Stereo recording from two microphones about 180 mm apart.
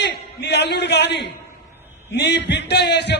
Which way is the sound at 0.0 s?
70° left (ahead or behind).